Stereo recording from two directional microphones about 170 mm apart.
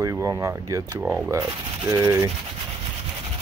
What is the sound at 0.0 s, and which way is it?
Speech, 20° right (ahead or behind).